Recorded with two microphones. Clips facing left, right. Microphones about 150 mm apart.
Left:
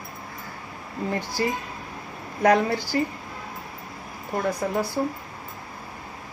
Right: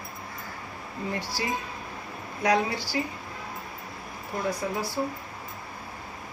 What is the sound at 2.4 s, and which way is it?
Speech, 55° left (ahead or behind).